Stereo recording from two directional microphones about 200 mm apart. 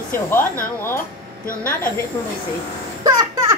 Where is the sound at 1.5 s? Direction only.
45° left (ahead or behind).